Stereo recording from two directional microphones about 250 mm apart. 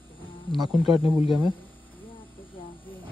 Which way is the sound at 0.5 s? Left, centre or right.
Centre.